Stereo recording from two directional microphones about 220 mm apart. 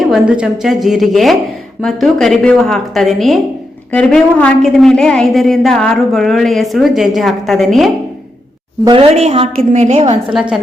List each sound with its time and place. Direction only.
0.0 s a woman's voice: centre (ahead or behind)
8.8 s a woman's voice: 25° right (ahead or behind)
10.3 s a woman's voice: centre (ahead or behind)